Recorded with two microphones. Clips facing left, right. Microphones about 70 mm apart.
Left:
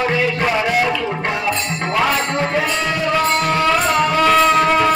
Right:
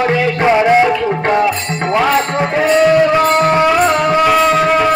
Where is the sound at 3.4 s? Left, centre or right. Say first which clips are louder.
Right 5 dB; right.